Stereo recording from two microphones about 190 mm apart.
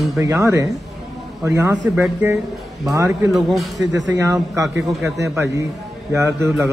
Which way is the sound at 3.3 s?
Centre (ahead or behind).